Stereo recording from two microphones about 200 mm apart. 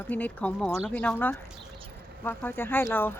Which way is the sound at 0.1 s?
5° left (ahead or behind).